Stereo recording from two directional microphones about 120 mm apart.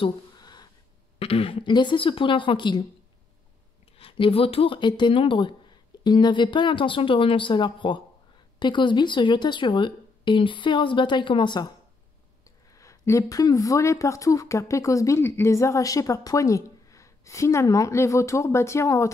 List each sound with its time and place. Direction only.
0.0 s a sound: 35° left (ahead or behind)
1.2 s speech: 50° left (ahead or behind)
4.0 s speech: 50° left (ahead or behind)
12.7 s speech: 25° left (ahead or behind)